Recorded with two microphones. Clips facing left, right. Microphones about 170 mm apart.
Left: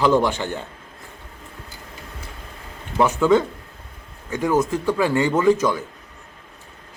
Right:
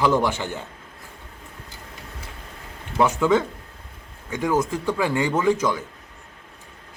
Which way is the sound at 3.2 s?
10° right (ahead or behind).